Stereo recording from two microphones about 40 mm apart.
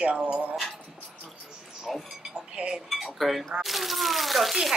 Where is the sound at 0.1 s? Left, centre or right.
Right.